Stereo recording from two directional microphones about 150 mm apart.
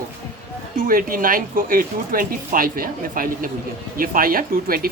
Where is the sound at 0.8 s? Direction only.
70° right (ahead or behind).